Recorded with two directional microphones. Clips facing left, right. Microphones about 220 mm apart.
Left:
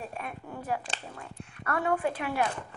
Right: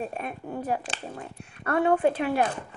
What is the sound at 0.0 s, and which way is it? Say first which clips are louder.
Speech: right 6 dB; 25° right (ahead or behind).